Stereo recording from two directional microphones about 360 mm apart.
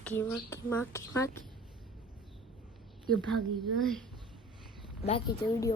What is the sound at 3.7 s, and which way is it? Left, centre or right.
Speech, centre.